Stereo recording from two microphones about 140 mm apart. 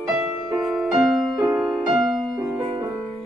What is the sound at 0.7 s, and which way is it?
Music, 5° right (ahead or behind).